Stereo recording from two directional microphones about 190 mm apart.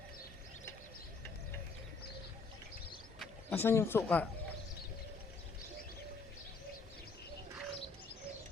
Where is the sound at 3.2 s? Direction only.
10° left (ahead or behind).